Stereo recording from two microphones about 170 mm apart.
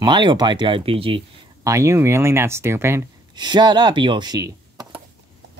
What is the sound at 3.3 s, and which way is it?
Speech, 25° right (ahead or behind).